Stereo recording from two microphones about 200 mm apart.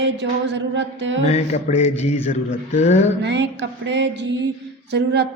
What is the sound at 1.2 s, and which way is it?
Music, 35° left (ahead or behind).